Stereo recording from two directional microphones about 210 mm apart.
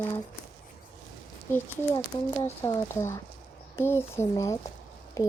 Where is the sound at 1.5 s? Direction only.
20° left (ahead or behind).